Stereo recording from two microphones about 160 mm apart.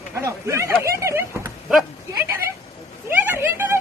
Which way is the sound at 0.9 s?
15° right (ahead or behind).